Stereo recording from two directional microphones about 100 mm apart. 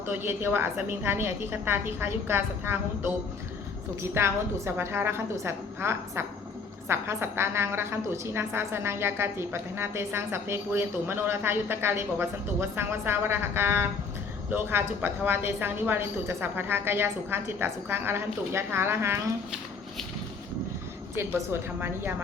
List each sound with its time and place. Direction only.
0.0 s a woman's voice: 20° right (ahead or behind)
21.2 s a woman's voice: 25° right (ahead or behind)